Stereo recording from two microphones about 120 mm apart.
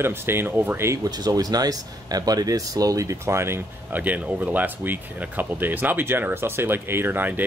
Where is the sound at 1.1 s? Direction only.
35° right (ahead or behind).